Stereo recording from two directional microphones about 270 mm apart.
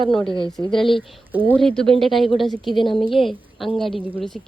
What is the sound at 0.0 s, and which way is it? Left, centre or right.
A woman's voice, centre.